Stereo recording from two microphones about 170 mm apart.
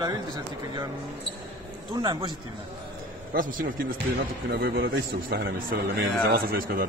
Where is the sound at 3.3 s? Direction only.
55° right (ahead or behind).